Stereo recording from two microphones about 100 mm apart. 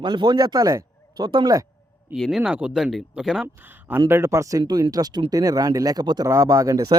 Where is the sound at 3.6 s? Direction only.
20° right (ahead or behind).